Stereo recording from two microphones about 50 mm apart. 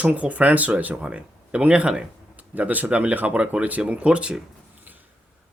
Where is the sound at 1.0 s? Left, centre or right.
Right.